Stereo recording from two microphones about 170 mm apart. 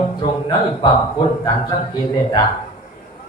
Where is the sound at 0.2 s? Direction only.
25° left (ahead or behind).